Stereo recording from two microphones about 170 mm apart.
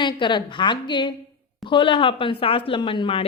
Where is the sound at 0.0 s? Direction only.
25° left (ahead or behind).